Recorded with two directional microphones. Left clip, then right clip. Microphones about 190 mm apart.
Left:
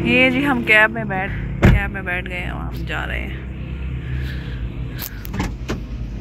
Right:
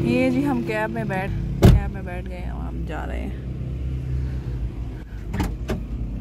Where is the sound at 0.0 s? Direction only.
15° right (ahead or behind).